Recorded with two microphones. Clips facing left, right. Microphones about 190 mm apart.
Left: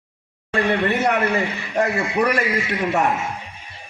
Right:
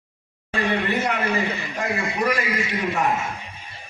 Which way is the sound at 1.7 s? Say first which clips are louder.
Left 6 dB; 65° left (ahead or behind).